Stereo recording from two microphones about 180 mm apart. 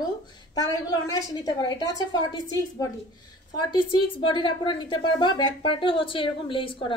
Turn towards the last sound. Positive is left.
turn(degrees=30)  # may be behind; listen again after turning